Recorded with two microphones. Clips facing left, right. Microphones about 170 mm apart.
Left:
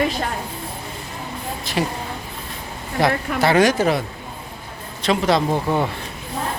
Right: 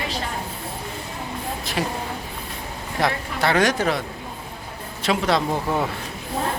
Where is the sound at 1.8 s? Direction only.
Centre (ahead or behind).